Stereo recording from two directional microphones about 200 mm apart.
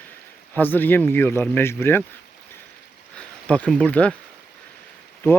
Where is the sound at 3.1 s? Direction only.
5° left (ahead or behind).